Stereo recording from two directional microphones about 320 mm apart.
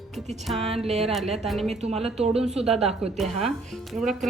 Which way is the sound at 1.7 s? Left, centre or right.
Centre.